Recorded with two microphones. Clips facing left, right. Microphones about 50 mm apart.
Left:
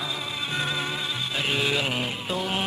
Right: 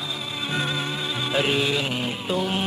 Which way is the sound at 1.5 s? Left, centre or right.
Centre.